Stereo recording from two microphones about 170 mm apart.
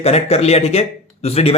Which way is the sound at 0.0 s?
35° left (ahead or behind).